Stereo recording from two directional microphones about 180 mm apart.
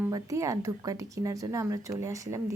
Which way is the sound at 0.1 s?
20° right (ahead or behind).